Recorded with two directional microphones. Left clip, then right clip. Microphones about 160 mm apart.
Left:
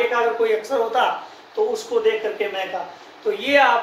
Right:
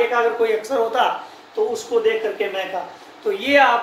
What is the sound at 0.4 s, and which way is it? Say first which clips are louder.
Speech: right 1 dB; 25° right (ahead or behind).